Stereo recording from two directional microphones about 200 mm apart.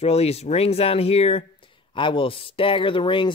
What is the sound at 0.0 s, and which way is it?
Speech, 30° left (ahead or behind).